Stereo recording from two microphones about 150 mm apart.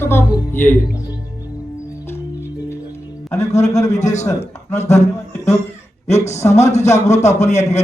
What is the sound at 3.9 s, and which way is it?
Speech, 50° left (ahead or behind).